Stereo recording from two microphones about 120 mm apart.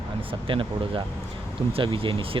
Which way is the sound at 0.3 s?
45° right (ahead or behind).